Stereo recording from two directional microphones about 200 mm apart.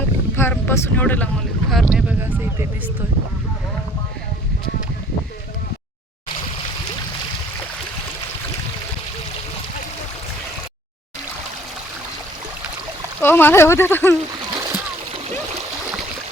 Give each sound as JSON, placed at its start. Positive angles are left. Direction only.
{"t": 0.3, "sound": "speech", "side_deg": 10}
{"t": 13.2, "sound": "speech", "side_deg": 10}
{"t": 14.4, "sound": "splash", "side_deg": -20}